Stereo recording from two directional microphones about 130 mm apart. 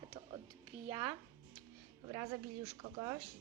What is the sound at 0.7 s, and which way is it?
Speech, 90° right.